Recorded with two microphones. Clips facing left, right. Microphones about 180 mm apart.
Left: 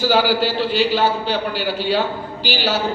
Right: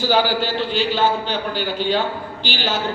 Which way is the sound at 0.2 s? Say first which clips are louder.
Left 2 dB; 10° left (ahead or behind).